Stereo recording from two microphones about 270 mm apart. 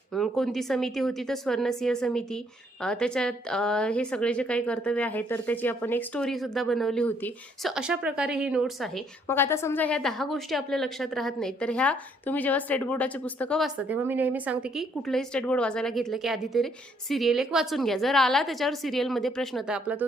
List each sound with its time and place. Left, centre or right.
0.1 s a woman's voice: centre